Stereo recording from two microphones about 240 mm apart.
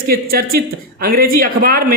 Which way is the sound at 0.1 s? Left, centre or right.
Right.